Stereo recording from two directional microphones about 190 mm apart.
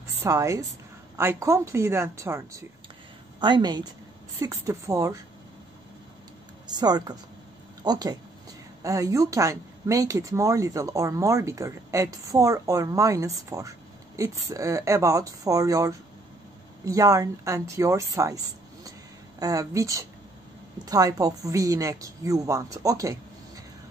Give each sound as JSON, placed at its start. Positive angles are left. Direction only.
{"t": 0.2, "sound": "a woman's voice", "side_deg": -15}
{"t": 6.7, "sound": "a woman's voice", "side_deg": -20}
{"t": 19.4, "sound": "a woman's voice", "side_deg": -20}